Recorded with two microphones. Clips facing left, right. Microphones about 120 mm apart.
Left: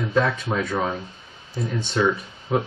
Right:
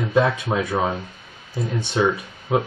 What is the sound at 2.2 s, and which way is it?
Speech, 10° right (ahead or behind).